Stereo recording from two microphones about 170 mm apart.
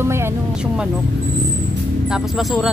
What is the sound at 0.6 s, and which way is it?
Speech, 5° right (ahead or behind).